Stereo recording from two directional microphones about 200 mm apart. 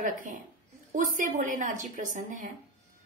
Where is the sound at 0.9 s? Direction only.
40° right (ahead or behind).